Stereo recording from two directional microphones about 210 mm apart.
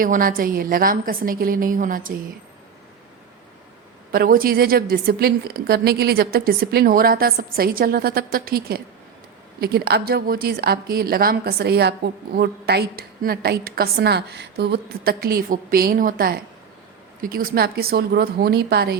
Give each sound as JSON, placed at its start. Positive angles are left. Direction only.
{"t": 0.0, "sound": "a woman's voice", "side_deg": -40}
{"t": 4.1, "sound": "a woman's voice", "side_deg": -45}